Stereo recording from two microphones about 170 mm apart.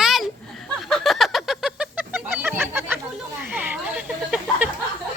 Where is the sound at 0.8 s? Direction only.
Centre (ahead or behind).